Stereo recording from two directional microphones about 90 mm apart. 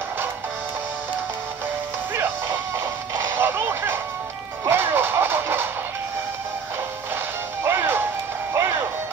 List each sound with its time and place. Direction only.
3.3 s music: 25° right (ahead or behind)
7.6 s music: 25° right (ahead or behind)